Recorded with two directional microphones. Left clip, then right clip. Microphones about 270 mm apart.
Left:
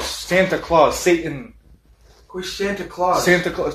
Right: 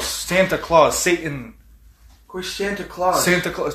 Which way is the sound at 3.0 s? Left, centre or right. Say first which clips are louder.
Left 1 dB; right.